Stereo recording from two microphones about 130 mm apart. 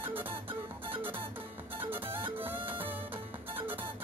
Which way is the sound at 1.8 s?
15° right (ahead or behind).